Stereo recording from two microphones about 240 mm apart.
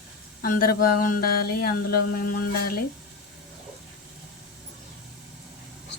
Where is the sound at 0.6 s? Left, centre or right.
Left.